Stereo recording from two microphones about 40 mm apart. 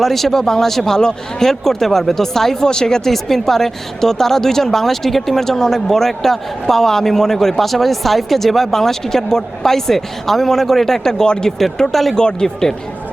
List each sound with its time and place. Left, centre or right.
0.0 s speech: centre
11.8 s speech: centre
12.1 s speech: centre